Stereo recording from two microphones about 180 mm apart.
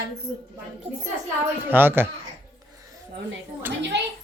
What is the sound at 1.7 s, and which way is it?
Speech, 10° right (ahead or behind).